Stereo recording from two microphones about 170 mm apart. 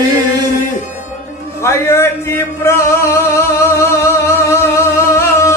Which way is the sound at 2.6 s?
15° left (ahead or behind).